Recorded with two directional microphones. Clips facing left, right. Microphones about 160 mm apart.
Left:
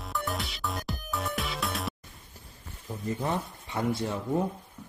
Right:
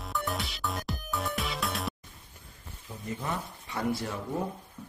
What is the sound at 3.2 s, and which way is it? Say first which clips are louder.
Speech: left 4 dB; 25° left (ahead or behind).